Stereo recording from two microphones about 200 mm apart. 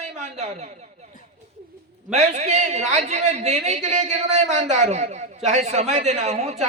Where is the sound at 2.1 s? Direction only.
35° right (ahead or behind).